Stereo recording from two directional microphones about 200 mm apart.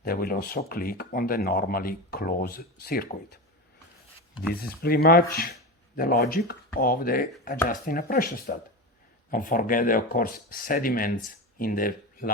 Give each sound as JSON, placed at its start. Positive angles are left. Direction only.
{"t": 0.0, "sound": "speech", "side_deg": 50}
{"t": 4.5, "sound": "speech", "side_deg": 50}